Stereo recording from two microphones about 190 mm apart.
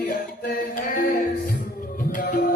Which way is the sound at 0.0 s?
45° left (ahead or behind).